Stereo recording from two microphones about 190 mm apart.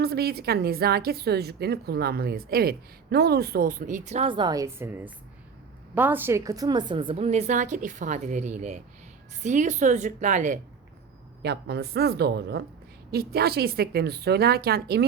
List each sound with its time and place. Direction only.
0.0 s a woman's voice: 55° right (ahead or behind)
11.4 s a woman's voice: 60° right (ahead or behind)